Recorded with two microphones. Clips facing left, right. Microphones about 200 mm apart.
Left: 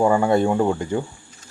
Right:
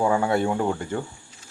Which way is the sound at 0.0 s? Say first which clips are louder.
Left 4 dB; 15° left (ahead or behind).